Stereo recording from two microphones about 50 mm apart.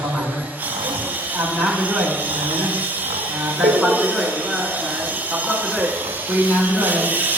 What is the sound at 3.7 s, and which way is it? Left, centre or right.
Speech, right.